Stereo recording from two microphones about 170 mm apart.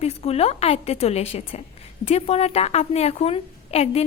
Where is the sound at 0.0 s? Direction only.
35° left (ahead or behind).